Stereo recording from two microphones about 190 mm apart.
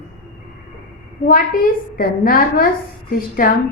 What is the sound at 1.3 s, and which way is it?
A woman's voice, 50° left (ahead or behind).